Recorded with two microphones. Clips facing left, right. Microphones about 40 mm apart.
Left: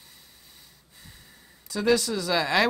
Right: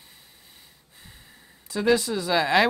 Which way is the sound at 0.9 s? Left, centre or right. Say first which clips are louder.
Right 1 dB; right.